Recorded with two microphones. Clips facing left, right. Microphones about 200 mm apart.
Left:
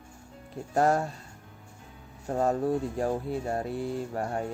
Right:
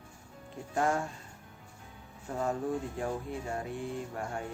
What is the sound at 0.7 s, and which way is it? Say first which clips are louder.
Speech: left 6 dB; 40° left (ahead or behind).